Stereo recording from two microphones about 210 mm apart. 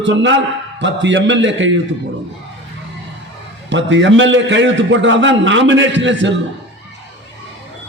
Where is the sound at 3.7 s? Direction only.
60° right (ahead or behind).